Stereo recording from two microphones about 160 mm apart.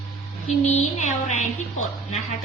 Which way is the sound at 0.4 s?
45° left (ahead or behind).